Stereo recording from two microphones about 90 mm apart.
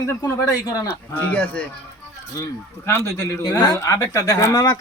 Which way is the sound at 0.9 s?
20° left (ahead or behind).